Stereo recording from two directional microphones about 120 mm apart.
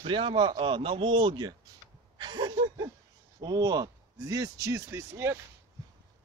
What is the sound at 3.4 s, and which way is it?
Speech, 35° right (ahead or behind).